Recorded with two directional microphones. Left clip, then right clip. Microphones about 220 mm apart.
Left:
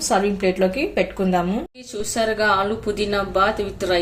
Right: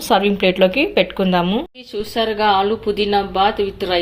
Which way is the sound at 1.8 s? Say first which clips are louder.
Left 1 dB; 10° right (ahead or behind).